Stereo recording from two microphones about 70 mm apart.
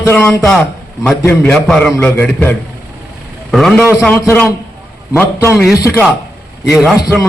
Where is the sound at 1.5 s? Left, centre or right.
Centre.